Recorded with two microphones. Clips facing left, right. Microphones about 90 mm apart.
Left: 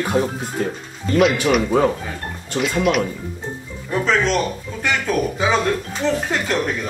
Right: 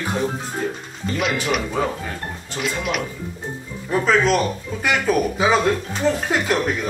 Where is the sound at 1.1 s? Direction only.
Centre (ahead or behind).